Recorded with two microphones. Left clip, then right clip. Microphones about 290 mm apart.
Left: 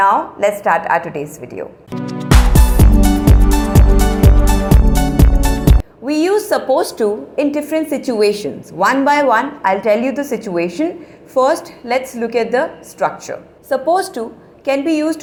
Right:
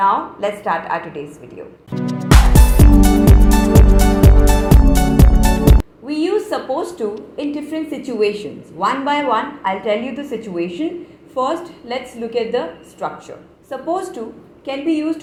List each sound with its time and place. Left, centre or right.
0.0 s a woman's voice: left
2.2 s music: centre
6.1 s a woman's voice: left